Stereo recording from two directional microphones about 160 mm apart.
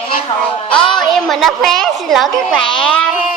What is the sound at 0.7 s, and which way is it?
A woman's voice, centre (ahead or behind).